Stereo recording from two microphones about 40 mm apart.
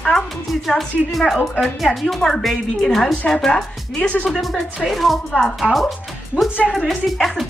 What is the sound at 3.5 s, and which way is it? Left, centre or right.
Speech, left.